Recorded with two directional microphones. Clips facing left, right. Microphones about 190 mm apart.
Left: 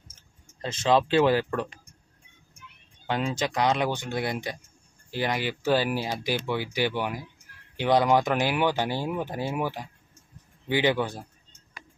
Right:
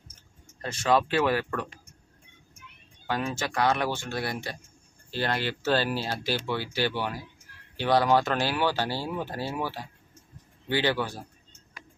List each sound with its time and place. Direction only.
0.6 s speech: 20° left (ahead or behind)
3.1 s speech: 20° left (ahead or behind)